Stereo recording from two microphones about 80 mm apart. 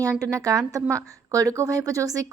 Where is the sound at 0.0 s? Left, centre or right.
Right.